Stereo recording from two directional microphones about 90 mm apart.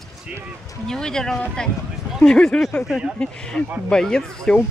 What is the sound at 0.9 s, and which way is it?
Speech, 5° left (ahead or behind).